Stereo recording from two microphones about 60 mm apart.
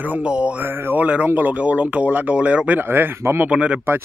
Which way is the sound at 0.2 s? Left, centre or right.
Centre.